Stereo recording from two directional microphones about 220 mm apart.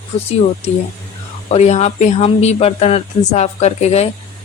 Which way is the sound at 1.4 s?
30° left (ahead or behind).